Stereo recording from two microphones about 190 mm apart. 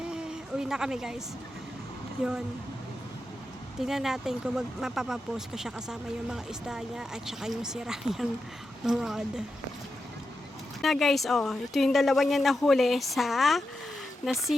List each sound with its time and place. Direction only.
0.0 s a sound: 5° right (ahead or behind)
3.8 s speech: centre (ahead or behind)
10.8 s speech: centre (ahead or behind)